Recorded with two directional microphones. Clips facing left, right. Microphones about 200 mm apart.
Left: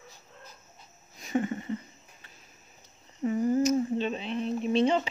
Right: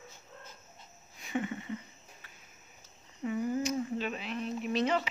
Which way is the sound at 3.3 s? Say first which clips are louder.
Left 7 dB; 40° left (ahead or behind).